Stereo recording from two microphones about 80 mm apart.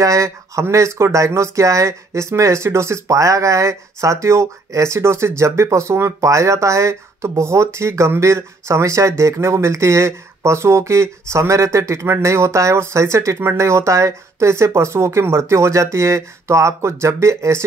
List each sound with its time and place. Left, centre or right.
0.0 s speech: right